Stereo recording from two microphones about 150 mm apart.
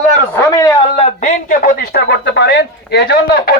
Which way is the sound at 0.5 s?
25° left (ahead or behind).